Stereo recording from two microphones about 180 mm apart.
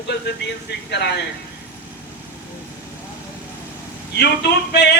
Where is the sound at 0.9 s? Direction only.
70° left (ahead or behind).